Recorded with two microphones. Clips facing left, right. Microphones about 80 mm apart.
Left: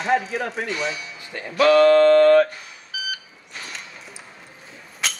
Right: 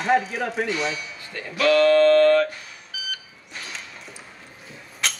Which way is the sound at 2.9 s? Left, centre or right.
Centre.